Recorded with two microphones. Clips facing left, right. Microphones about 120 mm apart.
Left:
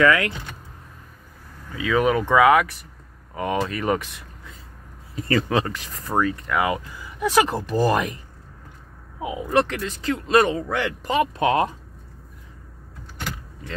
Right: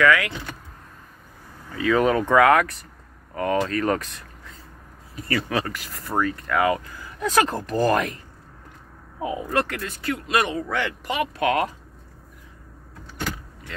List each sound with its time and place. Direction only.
0.0 s speech: 30° left (ahead or behind)
1.8 s speech: 5° left (ahead or behind)
5.1 s speech: 25° left (ahead or behind)
9.2 s speech: 15° left (ahead or behind)